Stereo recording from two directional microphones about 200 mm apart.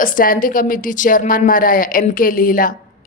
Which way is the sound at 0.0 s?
45° left (ahead or behind).